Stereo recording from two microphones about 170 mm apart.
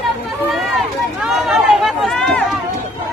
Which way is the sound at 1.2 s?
Centre (ahead or behind).